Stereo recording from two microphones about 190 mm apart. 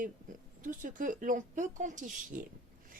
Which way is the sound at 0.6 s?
45° right (ahead or behind).